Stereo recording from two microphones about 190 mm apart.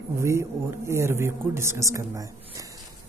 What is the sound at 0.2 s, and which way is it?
Speech, 15° right (ahead or behind).